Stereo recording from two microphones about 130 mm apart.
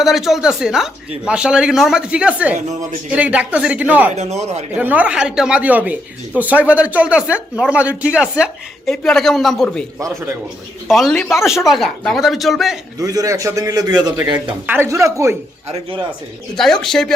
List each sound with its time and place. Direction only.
0.0 s speech: centre (ahead or behind)
4.1 s speech: 60° right (ahead or behind)
4.7 s speech: 10° right (ahead or behind)
10.8 s speech: centre (ahead or behind)
13.0 s a man's voice: 30° right (ahead or behind)
14.7 s a man's voice: 20° right (ahead or behind)
16.6 s speech: centre (ahead or behind)